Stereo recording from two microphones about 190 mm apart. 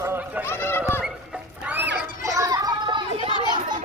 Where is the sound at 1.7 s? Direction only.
10° right (ahead or behind).